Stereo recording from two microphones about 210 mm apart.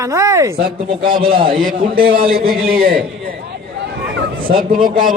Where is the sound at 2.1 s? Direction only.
25° right (ahead or behind).